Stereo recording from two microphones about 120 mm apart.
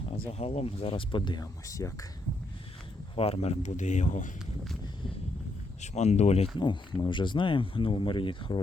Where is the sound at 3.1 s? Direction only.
55° left (ahead or behind); by 4.2 s 90° left.